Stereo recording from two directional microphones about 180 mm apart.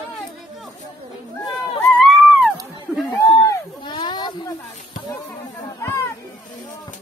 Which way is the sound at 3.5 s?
25° left (ahead or behind).